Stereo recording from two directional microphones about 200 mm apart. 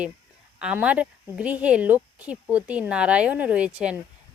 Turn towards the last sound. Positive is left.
turn(degrees=-5)  # may be behind; listen again after turning